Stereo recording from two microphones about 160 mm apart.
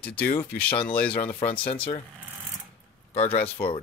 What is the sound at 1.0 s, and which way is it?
Speech, 10° left (ahead or behind).